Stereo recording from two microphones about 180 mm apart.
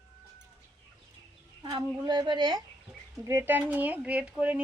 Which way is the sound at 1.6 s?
25° right (ahead or behind).